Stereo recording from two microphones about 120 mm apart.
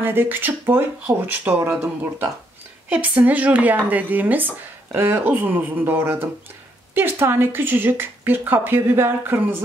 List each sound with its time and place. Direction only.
0.0 s speech: 20° right (ahead or behind)